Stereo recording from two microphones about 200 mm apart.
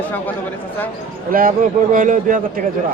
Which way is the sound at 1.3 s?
45° right (ahead or behind).